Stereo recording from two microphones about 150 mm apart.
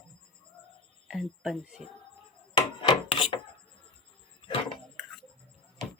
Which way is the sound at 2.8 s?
35° left (ahead or behind).